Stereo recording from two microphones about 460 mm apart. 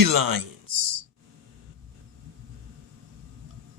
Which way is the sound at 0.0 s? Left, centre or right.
Right.